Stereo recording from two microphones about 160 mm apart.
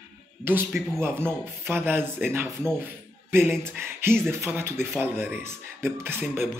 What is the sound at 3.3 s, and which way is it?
Speech, 15° right (ahead or behind).